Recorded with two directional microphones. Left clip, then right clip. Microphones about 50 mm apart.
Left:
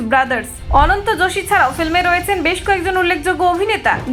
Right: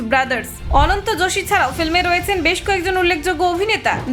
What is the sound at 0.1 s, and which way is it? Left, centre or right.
A woman's voice, left.